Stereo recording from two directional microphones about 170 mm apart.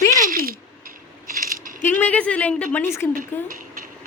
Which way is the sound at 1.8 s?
10° left (ahead or behind).